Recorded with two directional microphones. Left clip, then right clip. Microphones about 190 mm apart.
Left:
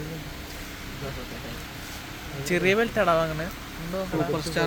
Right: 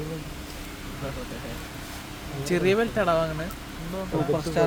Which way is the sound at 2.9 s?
15° left (ahead or behind).